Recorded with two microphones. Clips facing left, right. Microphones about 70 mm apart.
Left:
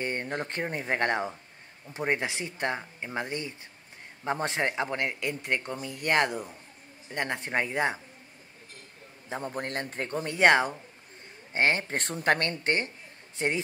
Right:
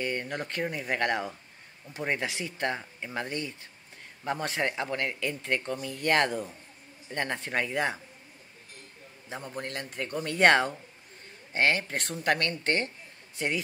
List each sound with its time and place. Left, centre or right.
0.0 s speech: left
9.3 s speech: left
10.3 s speech: centre
11.5 s speech: left